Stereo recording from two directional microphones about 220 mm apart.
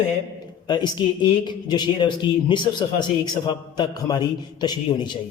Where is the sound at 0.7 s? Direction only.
20° left (ahead or behind).